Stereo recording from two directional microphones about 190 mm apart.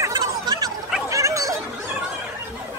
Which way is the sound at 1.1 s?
15° right (ahead or behind).